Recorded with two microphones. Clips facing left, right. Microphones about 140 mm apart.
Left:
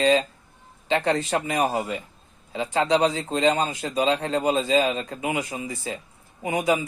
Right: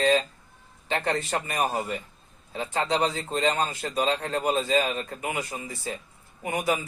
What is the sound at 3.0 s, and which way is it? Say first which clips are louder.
A man's voice: left 4 dB; 15° left (ahead or behind).